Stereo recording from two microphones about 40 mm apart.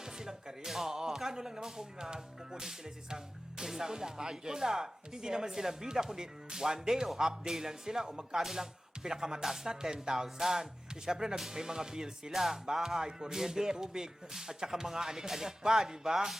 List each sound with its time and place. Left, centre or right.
0.0 s speech: centre
3.6 s music: centre